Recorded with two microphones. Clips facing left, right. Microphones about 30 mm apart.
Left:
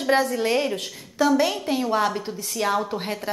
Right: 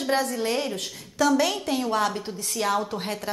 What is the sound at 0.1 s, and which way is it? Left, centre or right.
Speech, left.